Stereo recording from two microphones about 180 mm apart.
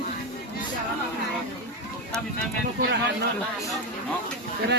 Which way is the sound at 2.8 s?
65° right (ahead or behind).